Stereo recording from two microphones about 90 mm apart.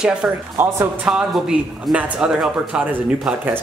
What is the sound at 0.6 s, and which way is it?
Speech, 25° right (ahead or behind).